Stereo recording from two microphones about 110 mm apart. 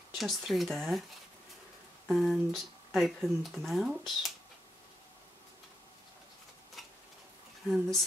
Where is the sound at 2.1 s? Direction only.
Centre (ahead or behind).